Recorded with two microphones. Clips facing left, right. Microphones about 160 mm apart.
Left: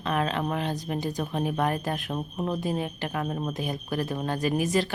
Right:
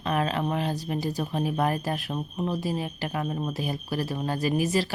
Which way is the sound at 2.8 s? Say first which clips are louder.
Even; 35° right (ahead or behind).